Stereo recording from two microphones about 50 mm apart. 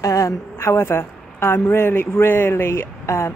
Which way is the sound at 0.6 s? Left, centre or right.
Left.